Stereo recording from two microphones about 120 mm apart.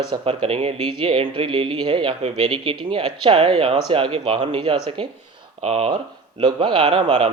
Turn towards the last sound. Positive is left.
turn(degrees=-50)  # may be behind; listen again after turning